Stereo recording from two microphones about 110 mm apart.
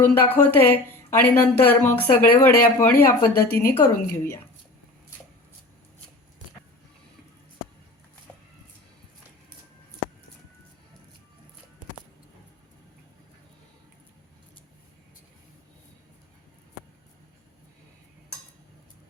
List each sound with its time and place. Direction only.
0.0 s speech: 15° left (ahead or behind)